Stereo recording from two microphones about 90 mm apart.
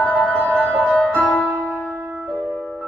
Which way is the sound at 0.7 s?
15° left (ahead or behind).